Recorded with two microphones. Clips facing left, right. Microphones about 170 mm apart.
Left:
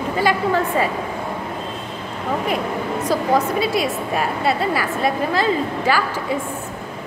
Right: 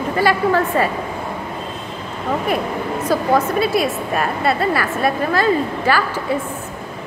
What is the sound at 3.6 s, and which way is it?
A woman's voice, 10° left (ahead or behind).